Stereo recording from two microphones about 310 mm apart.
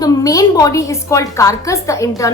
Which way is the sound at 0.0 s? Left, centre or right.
Centre.